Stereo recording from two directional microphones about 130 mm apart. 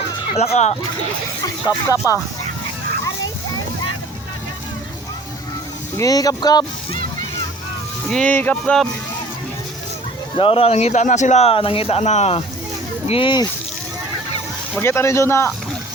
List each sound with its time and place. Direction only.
0.3 s speech: 55° left (ahead or behind)
1.9 s speech: 25° left (ahead or behind)
6.0 s speech: 30° left (ahead or behind)
8.1 s speech: 10° left (ahead or behind)
10.3 s speech: 45° left (ahead or behind)
13.1 s speech: 40° left (ahead or behind)
14.8 s speech: 20° left (ahead or behind)